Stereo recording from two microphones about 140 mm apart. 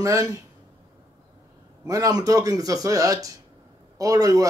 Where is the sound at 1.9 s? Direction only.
25° right (ahead or behind).